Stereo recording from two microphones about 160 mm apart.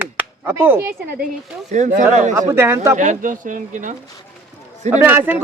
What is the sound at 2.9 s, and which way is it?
Speech, 50° right (ahead or behind).